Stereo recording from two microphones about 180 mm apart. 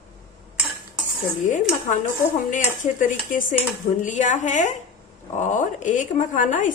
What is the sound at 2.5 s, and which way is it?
Speech, 45° left (ahead or behind).